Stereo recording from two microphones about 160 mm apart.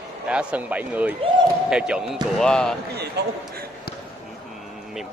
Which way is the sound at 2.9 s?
90° right.